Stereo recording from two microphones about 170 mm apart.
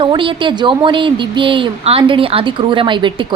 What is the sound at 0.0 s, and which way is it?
A woman's voice, 30° right (ahead or behind).